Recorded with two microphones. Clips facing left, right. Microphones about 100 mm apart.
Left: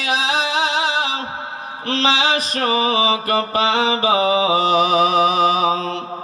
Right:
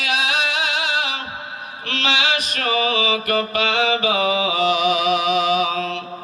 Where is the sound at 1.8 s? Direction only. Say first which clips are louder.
Left 4 dB; 35° left (ahead or behind).